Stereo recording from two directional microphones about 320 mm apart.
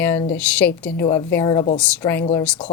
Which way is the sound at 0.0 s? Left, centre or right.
Centre.